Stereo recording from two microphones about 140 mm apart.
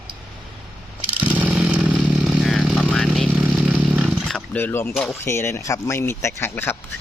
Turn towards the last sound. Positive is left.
turn(degrees=20)  # may be behind; listen again after turning